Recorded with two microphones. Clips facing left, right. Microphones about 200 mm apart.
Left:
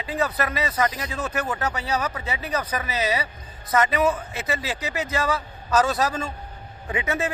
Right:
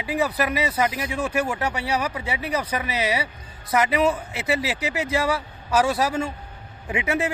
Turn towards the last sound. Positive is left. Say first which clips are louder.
# right 2 dB
turn(degrees=-15)  # may be behind; listen again after turning